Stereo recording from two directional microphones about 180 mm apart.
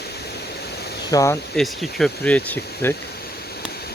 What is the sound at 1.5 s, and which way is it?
Speech, centre (ahead or behind).